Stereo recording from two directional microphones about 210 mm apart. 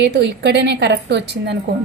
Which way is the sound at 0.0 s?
55° right (ahead or behind).